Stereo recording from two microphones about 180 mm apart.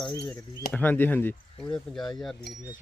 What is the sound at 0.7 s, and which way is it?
Speech, 10° left (ahead or behind).